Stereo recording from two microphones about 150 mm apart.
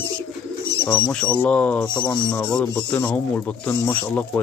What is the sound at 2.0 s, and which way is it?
Speech, 30° left (ahead or behind).